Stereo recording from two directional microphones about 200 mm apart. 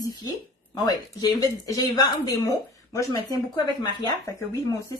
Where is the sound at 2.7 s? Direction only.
15° left (ahead or behind).